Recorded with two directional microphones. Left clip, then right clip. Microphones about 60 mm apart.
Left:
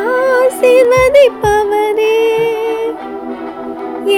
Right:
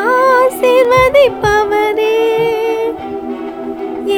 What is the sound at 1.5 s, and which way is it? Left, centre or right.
Music, centre.